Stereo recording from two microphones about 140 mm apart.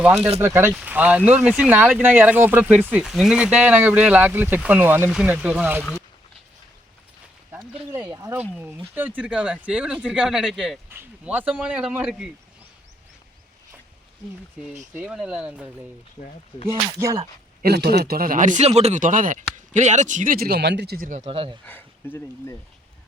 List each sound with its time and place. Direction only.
0.0 s speech: 10° right (ahead or behind)
8.1 s speech: 25° right (ahead or behind)
9.0 s speech: 10° right (ahead or behind)
10.8 s speech: 15° right (ahead or behind)
14.9 s speech: 5° right (ahead or behind)
17.6 s speech: 90° right
21.2 s speech: 40° right (ahead or behind)
21.6 s speech: 10° left (ahead or behind)